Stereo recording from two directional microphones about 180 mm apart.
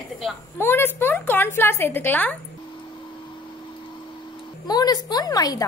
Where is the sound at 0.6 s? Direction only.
15° left (ahead or behind).